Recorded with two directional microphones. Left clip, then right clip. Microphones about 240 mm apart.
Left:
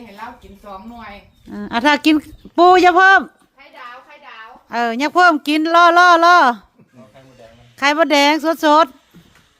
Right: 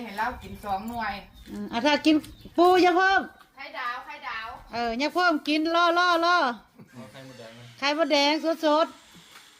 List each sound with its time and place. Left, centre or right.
1.5 s speech: left
4.7 s speech: left
7.8 s speech: left